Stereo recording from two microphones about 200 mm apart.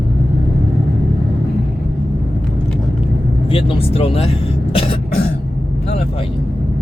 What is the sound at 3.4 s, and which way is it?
Throat clearing, 30° left (ahead or behind).